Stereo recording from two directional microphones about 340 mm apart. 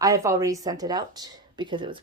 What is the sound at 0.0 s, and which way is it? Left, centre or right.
Speech, centre.